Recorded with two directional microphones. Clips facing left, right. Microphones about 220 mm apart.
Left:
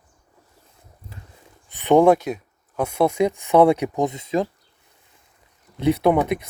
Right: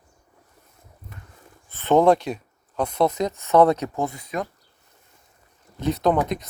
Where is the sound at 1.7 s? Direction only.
15° left (ahead or behind).